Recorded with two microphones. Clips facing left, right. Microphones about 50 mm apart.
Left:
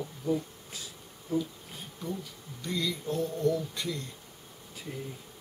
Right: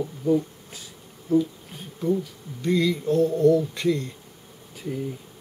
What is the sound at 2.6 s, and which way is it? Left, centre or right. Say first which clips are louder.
Speech: right 10 dB; centre.